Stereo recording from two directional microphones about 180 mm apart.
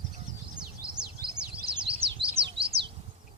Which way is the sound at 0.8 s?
30° right (ahead or behind).